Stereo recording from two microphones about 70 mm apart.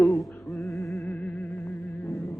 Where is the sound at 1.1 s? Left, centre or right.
Centre.